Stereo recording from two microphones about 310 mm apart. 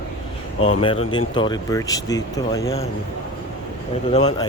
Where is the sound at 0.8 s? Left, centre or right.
Centre.